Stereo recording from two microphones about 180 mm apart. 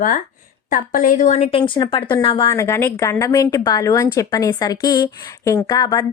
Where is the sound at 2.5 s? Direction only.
15° left (ahead or behind).